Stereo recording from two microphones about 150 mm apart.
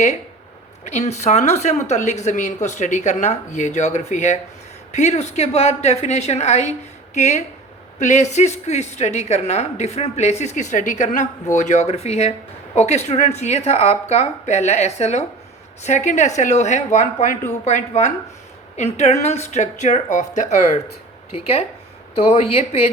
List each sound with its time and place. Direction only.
0.9 s speech: 50° left (ahead or behind)
21.3 s speech: 40° left (ahead or behind)